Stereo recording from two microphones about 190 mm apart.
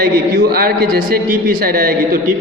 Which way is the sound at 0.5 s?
50° right (ahead or behind).